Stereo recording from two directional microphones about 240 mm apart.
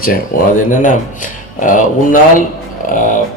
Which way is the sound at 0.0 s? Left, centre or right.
Left.